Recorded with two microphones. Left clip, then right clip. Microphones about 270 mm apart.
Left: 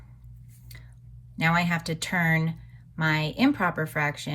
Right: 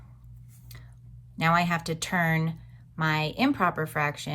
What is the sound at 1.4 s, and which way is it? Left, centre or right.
Speech, right.